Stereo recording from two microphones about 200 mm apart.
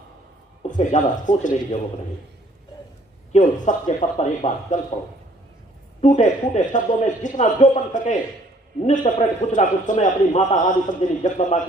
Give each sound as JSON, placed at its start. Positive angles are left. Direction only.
{"t": 0.7, "sound": "a man's voice", "side_deg": 40}
{"t": 3.3, "sound": "a man's voice", "side_deg": 40}
{"t": 6.0, "sound": "a man's voice", "side_deg": 40}